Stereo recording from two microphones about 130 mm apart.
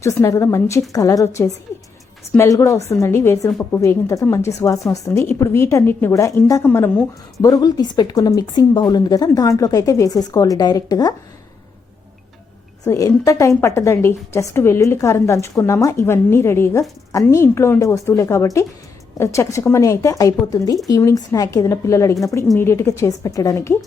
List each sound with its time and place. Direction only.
0.0 s a woman's voice: 25° left (ahead or behind)
7.4 s a woman's voice: 30° left (ahead or behind)
12.8 s a woman's voice: 25° left (ahead or behind)